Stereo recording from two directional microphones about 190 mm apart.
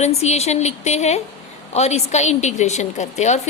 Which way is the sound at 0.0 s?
35° left (ahead or behind).